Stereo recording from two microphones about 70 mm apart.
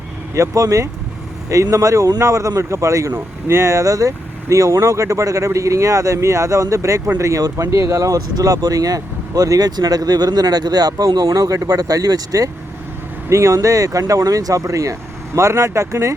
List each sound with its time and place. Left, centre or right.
0.3 s speech: right
13.3 s speech: right